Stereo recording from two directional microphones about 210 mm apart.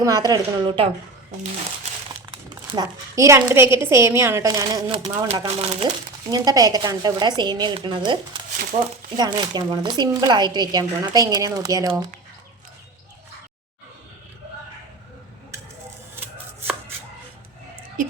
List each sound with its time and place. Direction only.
0.0 s speech: 15° right (ahead or behind)
2.3 s a woman's voice: 20° right (ahead or behind)